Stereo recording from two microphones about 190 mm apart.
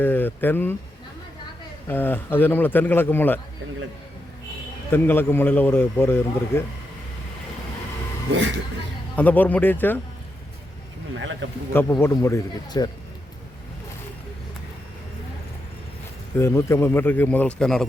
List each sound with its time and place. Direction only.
0.0 s speech: 10° left (ahead or behind)
1.9 s speech: 10° left (ahead or behind)
4.9 s speech: 10° left (ahead or behind)
9.1 s speech: 10° left (ahead or behind)
11.1 s a man's voice: 75° right (ahead or behind)
11.7 s speech: 10° left (ahead or behind)
16.4 s speech: 15° left (ahead or behind)